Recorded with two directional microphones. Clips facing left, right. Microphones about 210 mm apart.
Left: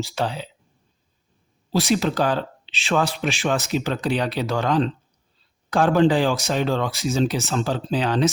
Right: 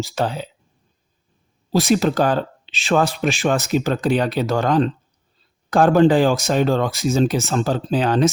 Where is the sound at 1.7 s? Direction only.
45° right (ahead or behind).